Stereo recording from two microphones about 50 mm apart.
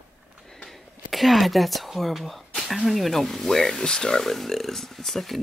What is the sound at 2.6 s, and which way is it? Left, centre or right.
Speech, centre.